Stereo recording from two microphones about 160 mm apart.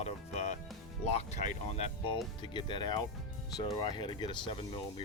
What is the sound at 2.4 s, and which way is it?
Speech, 30° left (ahead or behind).